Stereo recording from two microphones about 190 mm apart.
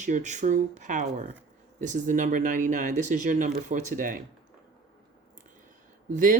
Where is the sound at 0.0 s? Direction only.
40° right (ahead or behind).